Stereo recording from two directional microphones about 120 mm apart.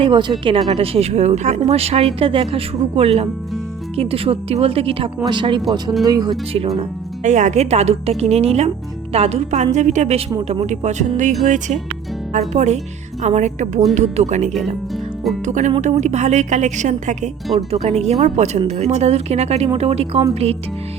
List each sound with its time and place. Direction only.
0.0 s speech: 40° right (ahead or behind)
5.2 s speech: 40° right (ahead or behind)
6.7 s speech: 80° right; by 9.6 s 65° right (ahead or behind)
9.7 s a woman's voice: 80° right
10.5 s speech: 70° right (ahead or behind)
11.4 s speech: 90° right
12.3 s a woman's voice: 70° right (ahead or behind)
15.4 s a woman's voice: 90° right
17.7 s speech: 60° right (ahead or behind)